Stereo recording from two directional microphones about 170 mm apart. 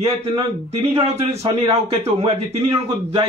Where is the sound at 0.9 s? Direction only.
40° right (ahead or behind).